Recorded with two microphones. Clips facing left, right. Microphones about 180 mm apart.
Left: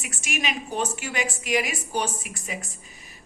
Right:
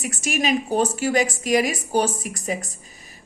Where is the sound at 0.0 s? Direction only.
40° right (ahead or behind).